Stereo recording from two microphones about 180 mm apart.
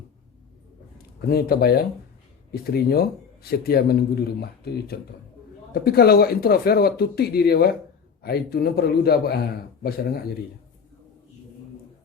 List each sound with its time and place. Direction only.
1.3 s a man's voice: 60° left (ahead or behind)